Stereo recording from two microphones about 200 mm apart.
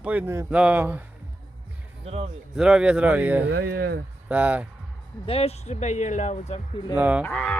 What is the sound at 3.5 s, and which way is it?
Speech, 55° right (ahead or behind).